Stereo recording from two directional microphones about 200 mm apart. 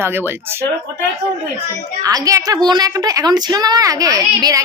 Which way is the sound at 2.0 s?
15° right (ahead or behind).